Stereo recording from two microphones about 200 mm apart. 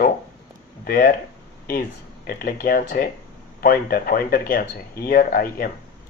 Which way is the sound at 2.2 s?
50° left (ahead or behind).